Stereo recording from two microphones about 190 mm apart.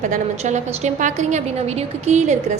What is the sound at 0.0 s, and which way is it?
A woman's voice, 40° right (ahead or behind).